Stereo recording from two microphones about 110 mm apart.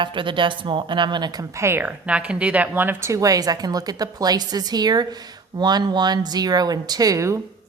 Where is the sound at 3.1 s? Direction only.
30° right (ahead or behind).